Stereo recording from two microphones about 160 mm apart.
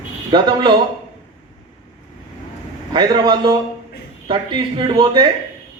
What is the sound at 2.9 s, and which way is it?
A man's voice, 30° right (ahead or behind).